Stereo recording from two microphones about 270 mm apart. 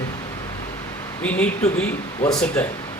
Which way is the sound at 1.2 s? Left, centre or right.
Centre.